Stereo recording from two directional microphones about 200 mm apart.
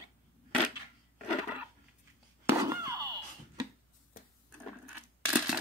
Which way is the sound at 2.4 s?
15° right (ahead or behind).